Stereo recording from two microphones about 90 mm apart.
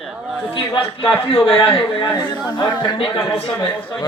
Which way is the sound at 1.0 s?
90° left.